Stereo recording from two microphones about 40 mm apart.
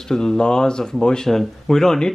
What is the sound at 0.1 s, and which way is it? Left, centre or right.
Speech, centre.